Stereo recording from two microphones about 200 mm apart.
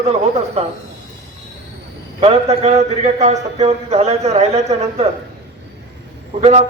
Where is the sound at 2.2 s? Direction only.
30° right (ahead or behind).